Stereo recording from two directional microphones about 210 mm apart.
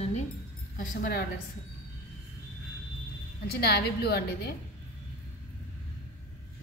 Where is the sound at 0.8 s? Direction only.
40° left (ahead or behind).